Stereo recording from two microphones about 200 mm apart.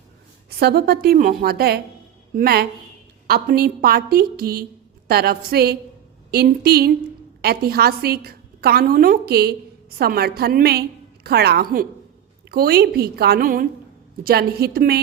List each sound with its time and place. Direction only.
0.6 s a woman's voice: 50° right (ahead or behind)